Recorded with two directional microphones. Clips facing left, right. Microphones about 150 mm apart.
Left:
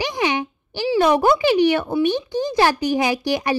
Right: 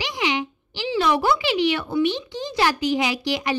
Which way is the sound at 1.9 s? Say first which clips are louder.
Left 3 dB; 15° left (ahead or behind).